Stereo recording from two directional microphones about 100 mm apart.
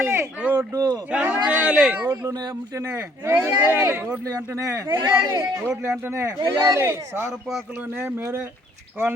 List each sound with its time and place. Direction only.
0.0 s speech: 20° right (ahead or behind)
0.5 s a man's voice: 40° right (ahead or behind)
1.1 s speech: 10° right (ahead or behind)
2.0 s a man's voice: 35° right (ahead or behind)
4.3 s a man's voice: 35° right (ahead or behind); by 8.1 s 15° right (ahead or behind)